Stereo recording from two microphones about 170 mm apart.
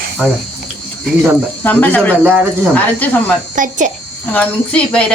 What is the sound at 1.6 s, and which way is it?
Speech, 10° left (ahead or behind).